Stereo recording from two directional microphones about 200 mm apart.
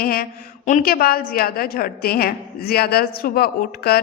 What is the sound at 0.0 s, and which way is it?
A woman's voice, 50° left (ahead or behind).